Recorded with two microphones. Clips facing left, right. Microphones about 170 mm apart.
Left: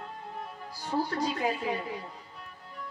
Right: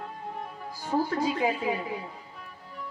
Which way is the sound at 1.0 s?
35° left (ahead or behind).